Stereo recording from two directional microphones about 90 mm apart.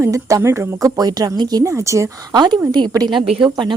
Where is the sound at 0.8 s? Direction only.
45° right (ahead or behind).